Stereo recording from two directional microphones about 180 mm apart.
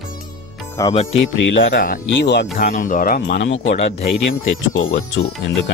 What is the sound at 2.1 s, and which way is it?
Speech, 70° left (ahead or behind).